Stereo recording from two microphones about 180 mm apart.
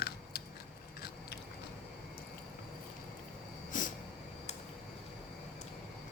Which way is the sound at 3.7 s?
45° left (ahead or behind).